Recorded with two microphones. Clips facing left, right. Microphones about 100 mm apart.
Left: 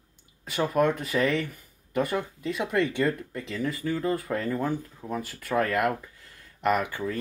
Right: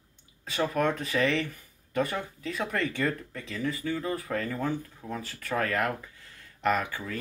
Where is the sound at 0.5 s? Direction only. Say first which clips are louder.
Left 3 dB; 15° left (ahead or behind).